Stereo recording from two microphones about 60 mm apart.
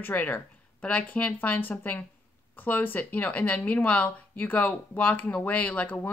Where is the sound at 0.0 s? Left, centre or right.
Left.